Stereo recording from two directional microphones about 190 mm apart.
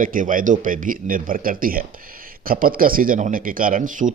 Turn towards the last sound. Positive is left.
turn(degrees=-40)  # may be behind; listen again after turning